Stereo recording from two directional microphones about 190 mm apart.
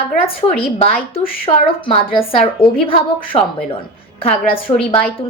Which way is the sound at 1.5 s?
25° left (ahead or behind).